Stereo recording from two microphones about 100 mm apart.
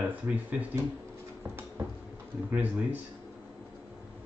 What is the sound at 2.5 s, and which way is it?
Speech, 15° right (ahead or behind).